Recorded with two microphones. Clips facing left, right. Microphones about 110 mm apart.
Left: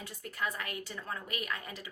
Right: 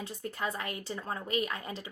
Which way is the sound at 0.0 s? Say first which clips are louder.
Right 3 dB; 30° right (ahead or behind).